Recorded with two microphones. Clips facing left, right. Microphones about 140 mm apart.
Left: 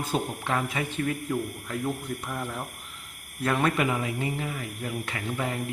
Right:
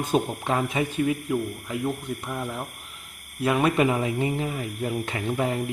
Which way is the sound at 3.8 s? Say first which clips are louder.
Right 5 dB; 25° right (ahead or behind).